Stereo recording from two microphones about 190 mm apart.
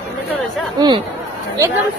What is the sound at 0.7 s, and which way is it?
Speech, 25° right (ahead or behind).